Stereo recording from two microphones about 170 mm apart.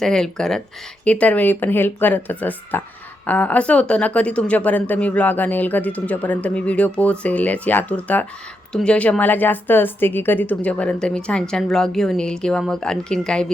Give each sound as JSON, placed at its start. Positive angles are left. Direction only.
{"t": 0.0, "sound": "a woman's voice", "side_deg": 5}